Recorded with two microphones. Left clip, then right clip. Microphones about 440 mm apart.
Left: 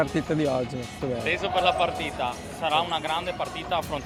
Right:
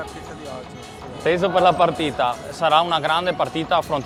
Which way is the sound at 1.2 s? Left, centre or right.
Right.